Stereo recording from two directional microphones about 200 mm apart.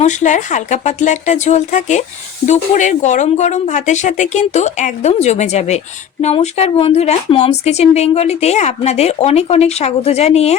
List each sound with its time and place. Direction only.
0.0 s a woman's voice: 35° left (ahead or behind)